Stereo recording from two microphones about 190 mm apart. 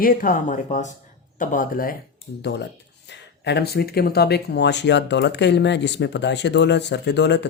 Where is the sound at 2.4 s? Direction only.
60° left (ahead or behind).